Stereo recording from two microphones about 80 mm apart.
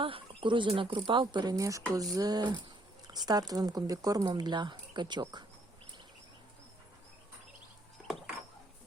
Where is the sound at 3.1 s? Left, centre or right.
Right.